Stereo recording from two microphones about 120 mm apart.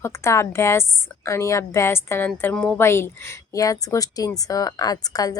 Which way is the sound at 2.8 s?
20° left (ahead or behind).